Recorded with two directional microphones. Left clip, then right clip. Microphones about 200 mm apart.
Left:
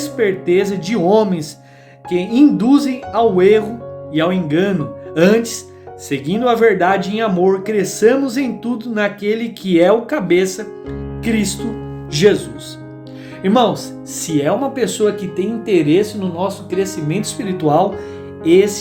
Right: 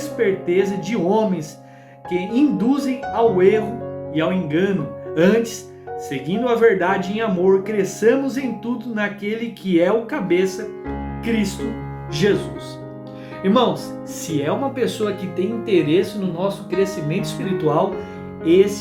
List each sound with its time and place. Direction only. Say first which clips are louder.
0.0 s speech: left 3 dB; 45° left (ahead or behind)
13.4 s speech: left 3 dB; 40° left (ahead or behind)